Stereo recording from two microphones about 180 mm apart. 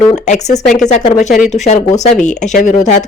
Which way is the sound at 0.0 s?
40° left (ahead or behind).